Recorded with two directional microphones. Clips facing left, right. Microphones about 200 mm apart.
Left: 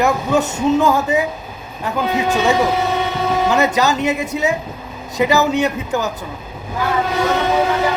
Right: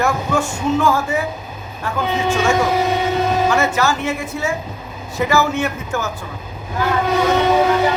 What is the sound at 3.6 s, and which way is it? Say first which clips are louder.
Speech: left 2 dB; 20° left (ahead or behind).